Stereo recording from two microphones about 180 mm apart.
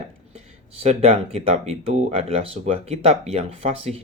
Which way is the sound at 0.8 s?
35° right (ahead or behind).